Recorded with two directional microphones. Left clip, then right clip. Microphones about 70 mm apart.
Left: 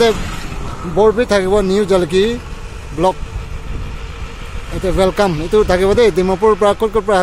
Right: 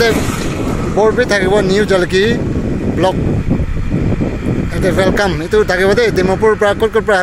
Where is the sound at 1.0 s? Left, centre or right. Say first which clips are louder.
Right 1 dB; centre.